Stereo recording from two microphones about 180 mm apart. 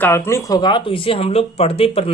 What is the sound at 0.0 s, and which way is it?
Speech, 15° left (ahead or behind).